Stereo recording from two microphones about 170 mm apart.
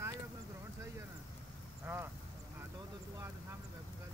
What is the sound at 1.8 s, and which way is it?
Speech, 10° right (ahead or behind).